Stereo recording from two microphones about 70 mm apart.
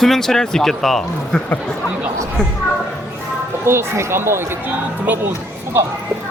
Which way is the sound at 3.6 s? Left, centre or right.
Right.